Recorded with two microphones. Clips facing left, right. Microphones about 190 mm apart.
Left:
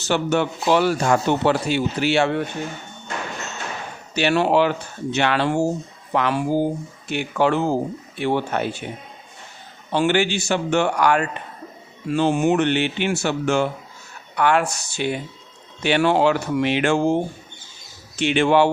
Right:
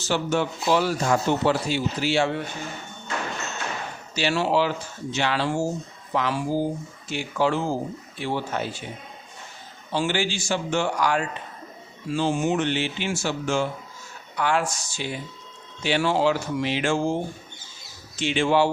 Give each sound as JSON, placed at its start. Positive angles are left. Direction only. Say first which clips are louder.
{"t": 0.0, "sound": "speech", "louder": "left 4 dB", "side_deg": 65}
{"t": 4.1, "sound": "speech", "louder": "left 5 dB", "side_deg": 60}
{"t": 9.9, "sound": "speech", "louder": "left 6 dB", "side_deg": 65}
{"t": 18.2, "sound": "speech", "louder": "left 4 dB", "side_deg": 65}